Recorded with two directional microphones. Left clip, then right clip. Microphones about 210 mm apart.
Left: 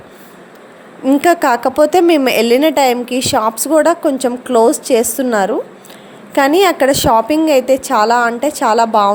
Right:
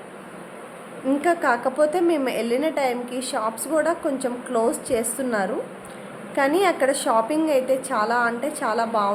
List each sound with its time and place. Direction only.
1.0 s a woman's voice: 40° left (ahead or behind)